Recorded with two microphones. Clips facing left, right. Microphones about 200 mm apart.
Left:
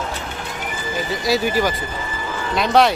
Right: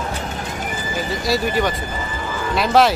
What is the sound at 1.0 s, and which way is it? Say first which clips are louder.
Speech: left 1 dB; centre (ahead or behind).